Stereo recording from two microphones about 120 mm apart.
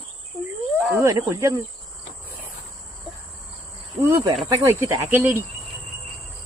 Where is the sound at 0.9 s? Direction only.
25° right (ahead or behind).